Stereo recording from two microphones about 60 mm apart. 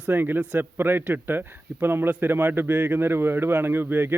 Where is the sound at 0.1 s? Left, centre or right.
Right.